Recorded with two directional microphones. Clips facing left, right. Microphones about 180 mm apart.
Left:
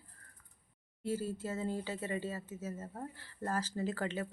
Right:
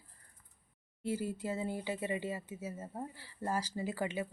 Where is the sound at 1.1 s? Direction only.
15° right (ahead or behind).